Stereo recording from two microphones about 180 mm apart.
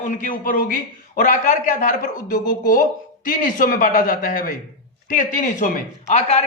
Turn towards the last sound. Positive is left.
turn(degrees=40)  # may be behind; listen again after turning